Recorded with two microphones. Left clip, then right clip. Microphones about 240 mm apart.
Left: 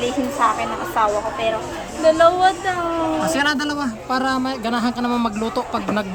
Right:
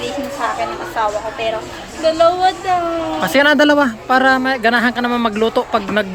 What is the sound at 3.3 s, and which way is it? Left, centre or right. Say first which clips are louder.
Speech: right 9 dB; centre.